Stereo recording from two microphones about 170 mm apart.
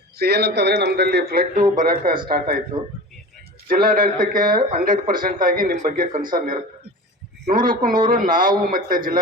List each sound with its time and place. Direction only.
0.2 s a man's voice: 70° right (ahead or behind); by 2.6 s 55° right (ahead or behind)
3.7 s speech: 55° right (ahead or behind)